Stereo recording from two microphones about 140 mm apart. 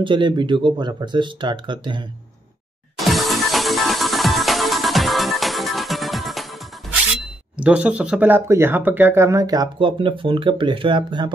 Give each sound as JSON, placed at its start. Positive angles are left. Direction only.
{"t": 0.0, "sound": "speech", "side_deg": -35}
{"t": 3.0, "sound": "music", "side_deg": 0}
{"t": 7.2, "sound": "speech", "side_deg": -10}